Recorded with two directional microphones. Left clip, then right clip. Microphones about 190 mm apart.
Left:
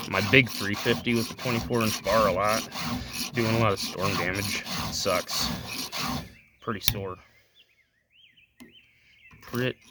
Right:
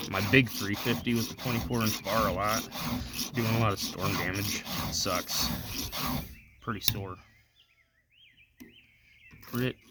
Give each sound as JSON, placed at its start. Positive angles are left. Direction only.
{"t": 0.1, "sound": "rub", "side_deg": 35}
{"t": 4.6, "sound": "speech", "side_deg": 15}
{"t": 4.9, "sound": "rub", "side_deg": 30}
{"t": 5.8, "sound": "filing", "side_deg": 15}
{"t": 6.2, "sound": "speech", "side_deg": 30}
{"t": 9.4, "sound": "a sound", "side_deg": 35}